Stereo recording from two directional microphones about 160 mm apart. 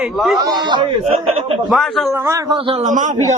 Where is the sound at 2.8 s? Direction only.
50° right (ahead or behind).